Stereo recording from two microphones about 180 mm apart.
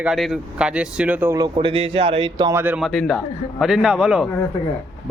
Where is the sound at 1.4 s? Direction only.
30° right (ahead or behind).